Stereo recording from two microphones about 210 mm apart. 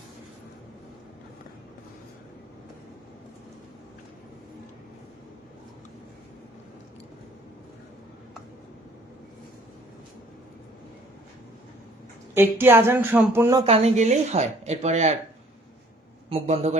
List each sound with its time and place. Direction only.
12.3 s speech: 10° right (ahead or behind); by 15.1 s 30° right (ahead or behind)
16.3 s speech: 30° right (ahead or behind)